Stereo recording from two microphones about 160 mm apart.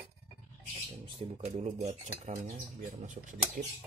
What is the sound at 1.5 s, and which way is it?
Speech, 45° right (ahead or behind).